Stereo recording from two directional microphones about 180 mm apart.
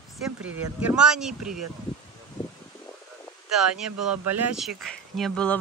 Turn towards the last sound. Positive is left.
turn(degrees=5)  # may be behind; listen again after turning